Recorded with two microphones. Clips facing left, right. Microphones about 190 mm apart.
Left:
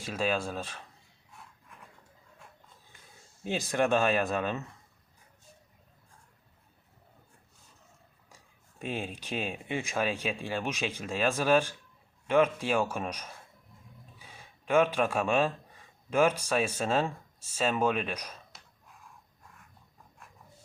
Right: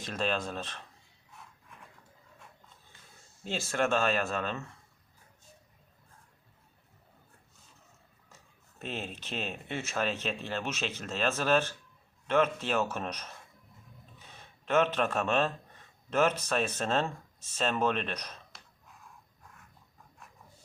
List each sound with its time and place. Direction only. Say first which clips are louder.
0.0 s speech: left 2 dB; 10° left (ahead or behind)
3.4 s speech: left 2 dB; 15° left (ahead or behind)
8.8 s speech: left 3 dB; 10° left (ahead or behind)